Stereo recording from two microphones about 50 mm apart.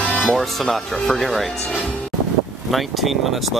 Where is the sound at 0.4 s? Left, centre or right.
Centre.